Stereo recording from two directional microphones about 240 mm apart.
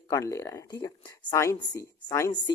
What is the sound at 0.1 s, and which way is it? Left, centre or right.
Speech, centre.